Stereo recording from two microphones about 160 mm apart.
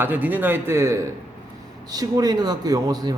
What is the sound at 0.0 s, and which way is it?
A man's voice, 10° right (ahead or behind).